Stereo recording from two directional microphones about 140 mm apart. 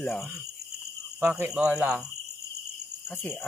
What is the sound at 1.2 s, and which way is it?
Speech, 10° right (ahead or behind).